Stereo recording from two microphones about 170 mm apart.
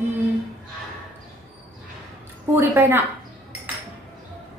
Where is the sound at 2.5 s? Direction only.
10° right (ahead or behind).